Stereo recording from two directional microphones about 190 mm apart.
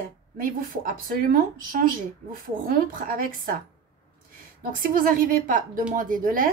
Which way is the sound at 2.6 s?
50° right (ahead or behind).